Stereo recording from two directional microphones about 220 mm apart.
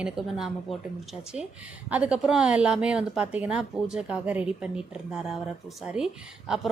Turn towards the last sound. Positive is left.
turn(degrees=-5)  # may be behind; listen again after turning